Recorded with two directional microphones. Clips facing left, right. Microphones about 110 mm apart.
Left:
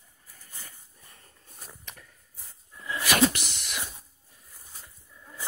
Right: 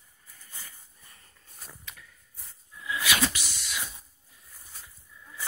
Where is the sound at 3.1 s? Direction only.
40° left (ahead or behind).